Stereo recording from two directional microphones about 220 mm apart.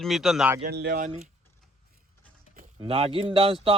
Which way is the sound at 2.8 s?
25° right (ahead or behind).